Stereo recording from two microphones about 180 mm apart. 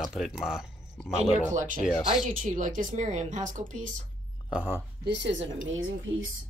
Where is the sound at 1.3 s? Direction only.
45° right (ahead or behind).